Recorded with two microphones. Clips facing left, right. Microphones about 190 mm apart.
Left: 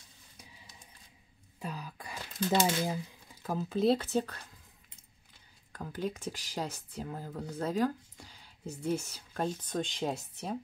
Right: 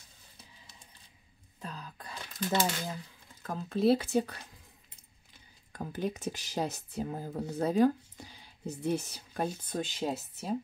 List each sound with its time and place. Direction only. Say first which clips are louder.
1.6 s speech: left 3 dB; 10° left (ahead or behind); by 4.5 s 15° right (ahead or behind)
5.7 s speech: right 2 dB; 20° right (ahead or behind); by 10.5 s 5° right (ahead or behind)